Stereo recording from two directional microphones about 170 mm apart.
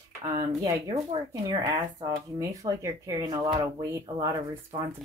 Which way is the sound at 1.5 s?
25° right (ahead or behind).